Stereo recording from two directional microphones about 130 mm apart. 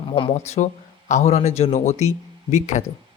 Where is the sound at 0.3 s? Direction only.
65° left (ahead or behind).